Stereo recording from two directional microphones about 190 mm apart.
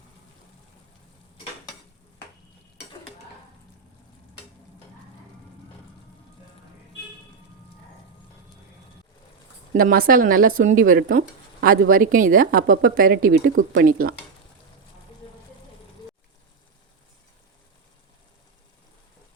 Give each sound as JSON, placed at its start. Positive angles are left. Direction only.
{"t": 9.7, "sound": "speech", "side_deg": -50}